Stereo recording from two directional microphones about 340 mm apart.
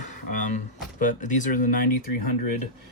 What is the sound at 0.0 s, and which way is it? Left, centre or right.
Speech, left.